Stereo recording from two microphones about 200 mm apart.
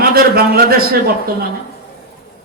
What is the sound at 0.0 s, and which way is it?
Speech, 50° right (ahead or behind).